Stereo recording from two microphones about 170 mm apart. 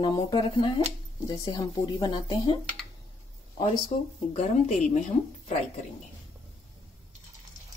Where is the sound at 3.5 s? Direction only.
30° left (ahead or behind).